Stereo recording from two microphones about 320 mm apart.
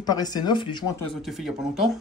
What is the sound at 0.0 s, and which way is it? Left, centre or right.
Speech, centre.